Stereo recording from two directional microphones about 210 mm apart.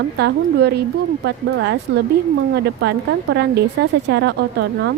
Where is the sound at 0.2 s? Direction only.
50° right (ahead or behind).